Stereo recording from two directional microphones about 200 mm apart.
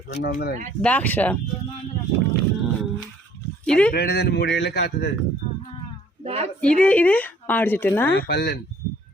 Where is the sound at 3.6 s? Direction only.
5° left (ahead or behind).